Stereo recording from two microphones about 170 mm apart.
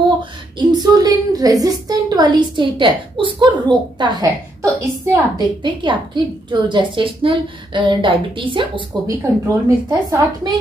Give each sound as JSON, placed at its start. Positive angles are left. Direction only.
{"t": 0.2, "sound": "a woman's voice", "side_deg": -25}
{"t": 5.6, "sound": "a woman's voice", "side_deg": -30}
{"t": 9.5, "sound": "a woman's voice", "side_deg": -20}